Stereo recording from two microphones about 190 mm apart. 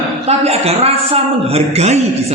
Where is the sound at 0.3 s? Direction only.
35° right (ahead or behind).